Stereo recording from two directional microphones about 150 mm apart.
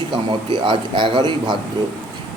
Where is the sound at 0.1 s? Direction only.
35° right (ahead or behind).